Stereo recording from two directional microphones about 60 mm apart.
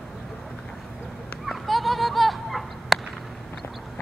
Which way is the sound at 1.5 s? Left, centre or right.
Centre.